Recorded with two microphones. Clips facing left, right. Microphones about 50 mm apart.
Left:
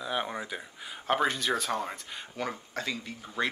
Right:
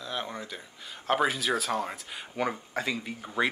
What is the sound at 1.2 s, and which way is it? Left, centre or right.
Speech, centre.